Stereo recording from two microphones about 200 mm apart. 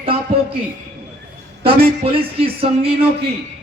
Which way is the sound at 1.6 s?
30° right (ahead or behind).